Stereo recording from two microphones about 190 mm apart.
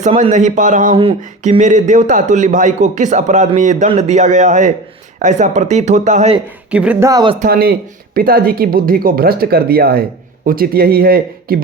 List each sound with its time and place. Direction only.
0.0 s speech: 40° right (ahead or behind)
6.7 s speech: 5° right (ahead or behind)
7.1 s speech: 20° right (ahead or behind)
7.3 s speech: 50° right (ahead or behind)